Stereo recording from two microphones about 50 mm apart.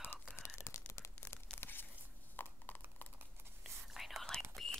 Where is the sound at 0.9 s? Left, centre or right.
Left.